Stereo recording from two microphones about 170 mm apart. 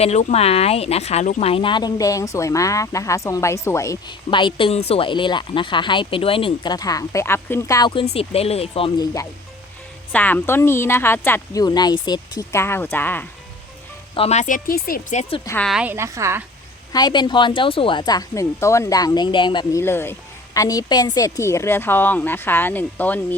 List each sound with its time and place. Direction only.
0.0 s speech: 40° left (ahead or behind); by 3.9 s 15° left (ahead or behind)
4.3 s speech: 30° left (ahead or behind)
8.1 s speech: 35° left (ahead or behind)
10.1 s a woman's voice: 10° left (ahead or behind)
14.2 s speech: 40° left (ahead or behind); by 15.2 s 55° left (ahead or behind)
15.6 s a woman's voice: 5° right (ahead or behind)
16.9 s speech: 25° left (ahead or behind)
19.8 s a woman's voice: 15° left (ahead or behind)